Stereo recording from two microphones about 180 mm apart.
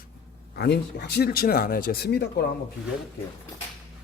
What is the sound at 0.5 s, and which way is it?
Speech, 60° left (ahead or behind).